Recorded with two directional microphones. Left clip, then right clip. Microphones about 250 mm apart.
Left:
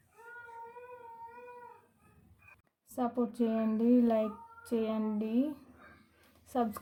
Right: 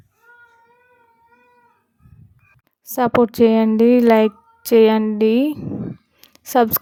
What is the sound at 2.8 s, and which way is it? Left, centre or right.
Speech, right.